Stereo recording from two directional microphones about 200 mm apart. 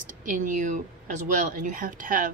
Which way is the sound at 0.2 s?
40° right (ahead or behind).